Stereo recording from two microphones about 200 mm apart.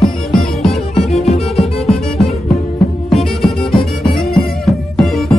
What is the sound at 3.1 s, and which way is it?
Music, centre (ahead or behind).